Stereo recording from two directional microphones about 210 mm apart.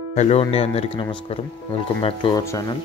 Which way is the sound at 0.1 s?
30° left (ahead or behind).